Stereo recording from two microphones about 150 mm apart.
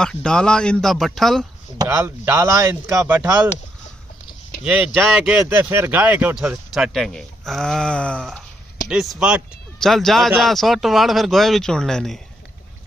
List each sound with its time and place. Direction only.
0.0 s speech: 5° left (ahead or behind)
1.8 s speech: 20° right (ahead or behind)
4.6 s speech: 5° right (ahead or behind)